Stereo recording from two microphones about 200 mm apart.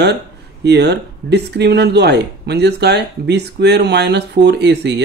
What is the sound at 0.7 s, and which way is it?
Speech, 55° right (ahead or behind).